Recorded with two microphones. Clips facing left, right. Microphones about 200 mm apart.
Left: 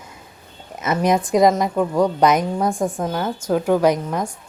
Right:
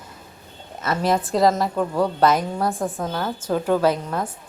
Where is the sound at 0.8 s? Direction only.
20° left (ahead or behind).